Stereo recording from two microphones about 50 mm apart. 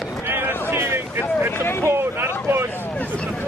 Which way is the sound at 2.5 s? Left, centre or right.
Right.